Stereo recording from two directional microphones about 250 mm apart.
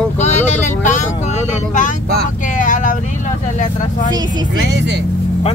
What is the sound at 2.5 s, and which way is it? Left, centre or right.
Vehicle, left.